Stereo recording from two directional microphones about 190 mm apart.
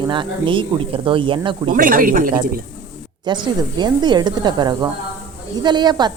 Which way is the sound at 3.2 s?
25° right (ahead or behind).